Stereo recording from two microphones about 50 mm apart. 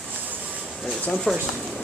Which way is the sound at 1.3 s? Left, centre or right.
Centre.